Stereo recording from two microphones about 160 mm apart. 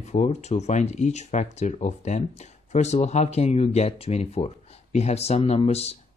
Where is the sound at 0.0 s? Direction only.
45° left (ahead or behind).